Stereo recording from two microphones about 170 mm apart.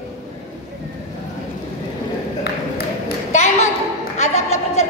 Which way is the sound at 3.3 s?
40° left (ahead or behind).